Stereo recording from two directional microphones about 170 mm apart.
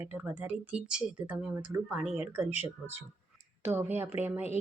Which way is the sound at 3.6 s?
15° right (ahead or behind).